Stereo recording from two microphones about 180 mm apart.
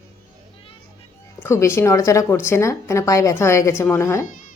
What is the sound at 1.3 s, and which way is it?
Speech, 15° left (ahead or behind).